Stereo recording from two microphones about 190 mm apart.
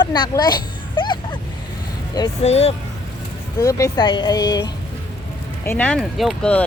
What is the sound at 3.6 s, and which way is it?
Speech, 20° left (ahead or behind).